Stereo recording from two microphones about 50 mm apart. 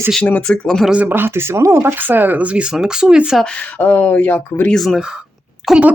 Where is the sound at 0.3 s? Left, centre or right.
Left.